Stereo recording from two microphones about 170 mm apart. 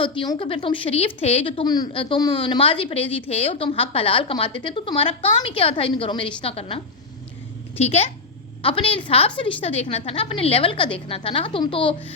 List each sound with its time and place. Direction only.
0.0 s speech: 30° left (ahead or behind)